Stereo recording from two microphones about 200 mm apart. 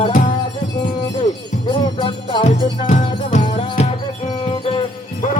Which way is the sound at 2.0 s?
25° left (ahead or behind).